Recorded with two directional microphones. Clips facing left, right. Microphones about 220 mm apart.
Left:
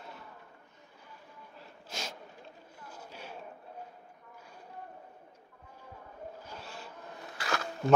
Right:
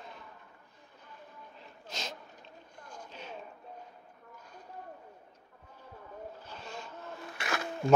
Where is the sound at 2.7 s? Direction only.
5° left (ahead or behind).